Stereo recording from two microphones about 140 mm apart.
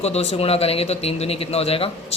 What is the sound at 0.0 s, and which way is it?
Speech, 50° left (ahead or behind).